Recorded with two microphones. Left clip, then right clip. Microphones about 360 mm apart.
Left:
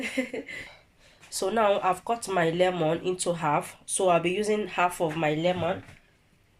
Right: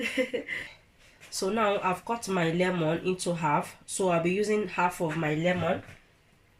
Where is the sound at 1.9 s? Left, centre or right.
Left.